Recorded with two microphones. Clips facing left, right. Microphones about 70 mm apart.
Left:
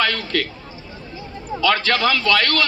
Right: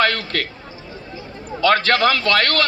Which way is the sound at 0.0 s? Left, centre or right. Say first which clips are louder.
Right 2 dB; right.